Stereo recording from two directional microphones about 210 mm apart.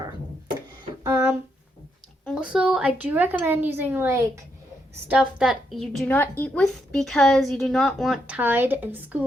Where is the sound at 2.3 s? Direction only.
5° right (ahead or behind).